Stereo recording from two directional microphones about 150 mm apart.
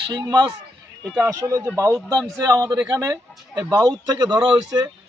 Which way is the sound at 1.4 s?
20° right (ahead or behind).